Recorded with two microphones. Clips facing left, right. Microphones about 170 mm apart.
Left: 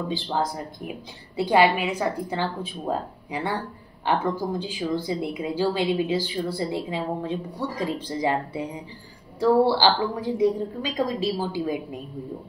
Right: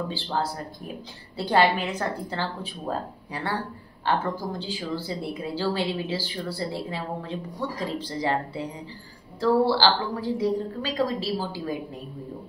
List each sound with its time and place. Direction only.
0.1 s a woman's voice: 15° left (ahead or behind)